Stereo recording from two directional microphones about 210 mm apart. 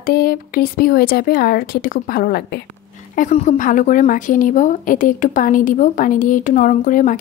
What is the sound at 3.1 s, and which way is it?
A woman's voice, 35° left (ahead or behind).